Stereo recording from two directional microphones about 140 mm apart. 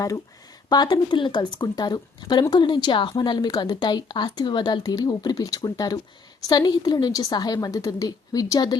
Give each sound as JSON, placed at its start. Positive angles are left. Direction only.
{"t": 0.7, "sound": "a woman's voice", "side_deg": 30}